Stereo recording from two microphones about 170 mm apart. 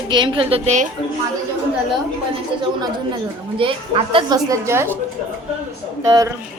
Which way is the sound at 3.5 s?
30° right (ahead or behind).